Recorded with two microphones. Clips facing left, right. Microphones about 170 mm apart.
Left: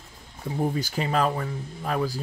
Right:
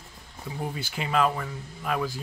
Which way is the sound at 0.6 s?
40° left (ahead or behind).